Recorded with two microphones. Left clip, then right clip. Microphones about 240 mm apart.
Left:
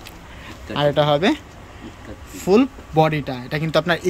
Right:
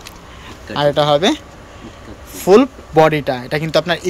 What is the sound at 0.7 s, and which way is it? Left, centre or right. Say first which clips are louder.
Speech: right 4 dB; centre.